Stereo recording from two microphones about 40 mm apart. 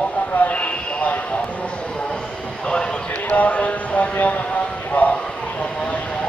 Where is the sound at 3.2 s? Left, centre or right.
Left.